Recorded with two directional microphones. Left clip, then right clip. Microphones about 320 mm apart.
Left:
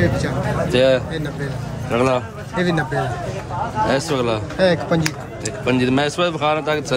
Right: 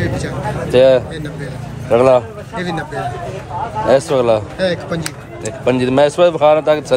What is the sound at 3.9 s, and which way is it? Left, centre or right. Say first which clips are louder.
Speech: right 11 dB; centre.